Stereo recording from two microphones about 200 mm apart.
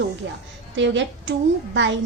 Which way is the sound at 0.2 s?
65° right (ahead or behind).